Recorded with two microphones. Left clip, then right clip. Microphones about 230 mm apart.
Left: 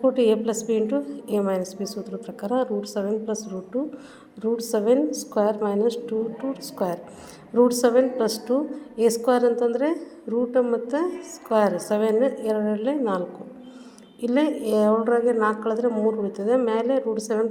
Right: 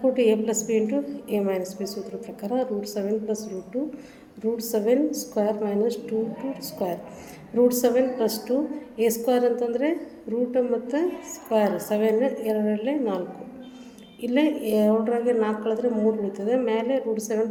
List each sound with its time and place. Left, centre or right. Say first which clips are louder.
0.0 s a woman's voice: left 1 dB; left
4.5 s a woman's voice: left 2 dB; left